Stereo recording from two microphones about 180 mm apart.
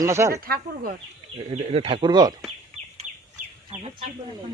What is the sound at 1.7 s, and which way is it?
Speech, 30° right (ahead or behind).